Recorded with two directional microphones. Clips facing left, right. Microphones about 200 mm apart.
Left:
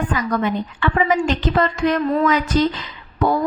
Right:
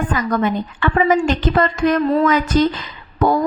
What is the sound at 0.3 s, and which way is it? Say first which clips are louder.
A woman's voice: right 2 dB; 45° right (ahead or behind).